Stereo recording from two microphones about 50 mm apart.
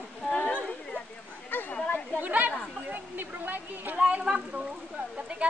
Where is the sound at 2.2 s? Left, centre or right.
Right.